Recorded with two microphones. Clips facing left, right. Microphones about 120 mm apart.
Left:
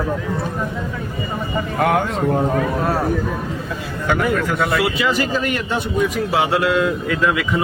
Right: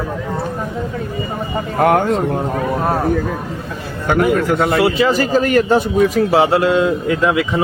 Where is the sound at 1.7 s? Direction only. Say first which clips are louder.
Right 4 dB; 45° right (ahead or behind).